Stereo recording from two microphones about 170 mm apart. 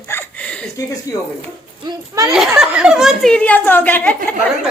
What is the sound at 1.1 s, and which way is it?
Speech, 20° left (ahead or behind).